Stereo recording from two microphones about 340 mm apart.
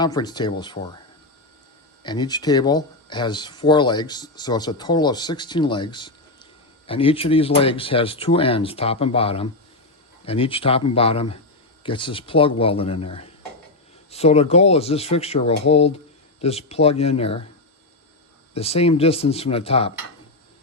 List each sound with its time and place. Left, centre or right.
0.0 s speech: centre
2.0 s speech: centre
18.5 s speech: centre